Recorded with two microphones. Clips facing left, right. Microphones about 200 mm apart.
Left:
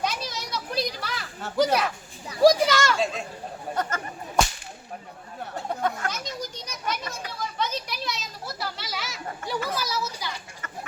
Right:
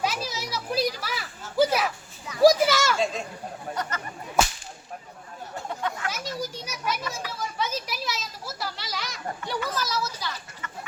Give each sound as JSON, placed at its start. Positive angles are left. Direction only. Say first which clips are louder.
{"t": 0.0, "sound": "children playing", "louder": "right 1 dB", "side_deg": -5}
{"t": 1.5, "sound": "a sound", "louder": "even", "side_deg": -5}
{"t": 3.8, "sound": "speech", "louder": "left 4 dB", "side_deg": 50}
{"t": 4.4, "sound": "whip", "louder": "even", "side_deg": -5}
{"t": 6.1, "sound": "children playing", "louder": "right 1 dB", "side_deg": -5}
{"t": 9.5, "sound": "a sound", "louder": "left 1 dB", "side_deg": 10}